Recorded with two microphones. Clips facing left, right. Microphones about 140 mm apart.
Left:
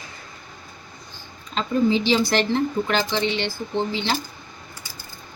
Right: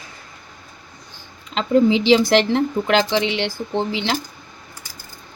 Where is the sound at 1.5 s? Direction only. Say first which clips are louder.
Right 5 dB; 90° right.